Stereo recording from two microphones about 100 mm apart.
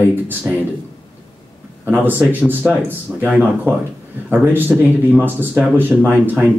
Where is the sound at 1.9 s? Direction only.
15° right (ahead or behind).